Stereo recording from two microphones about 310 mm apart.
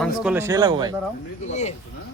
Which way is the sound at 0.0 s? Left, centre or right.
Centre.